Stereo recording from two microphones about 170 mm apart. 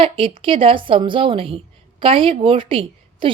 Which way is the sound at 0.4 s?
30° right (ahead or behind).